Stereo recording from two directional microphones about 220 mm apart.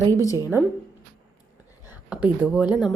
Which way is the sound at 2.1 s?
5° right (ahead or behind).